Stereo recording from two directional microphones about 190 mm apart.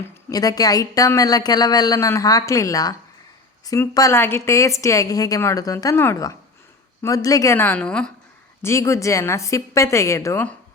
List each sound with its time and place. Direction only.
0.3 s a woman's voice: 20° left (ahead or behind)
8.6 s a woman's voice: 15° left (ahead or behind)